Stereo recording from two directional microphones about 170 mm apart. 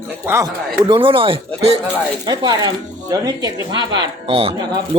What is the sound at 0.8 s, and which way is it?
Speech, 30° right (ahead or behind).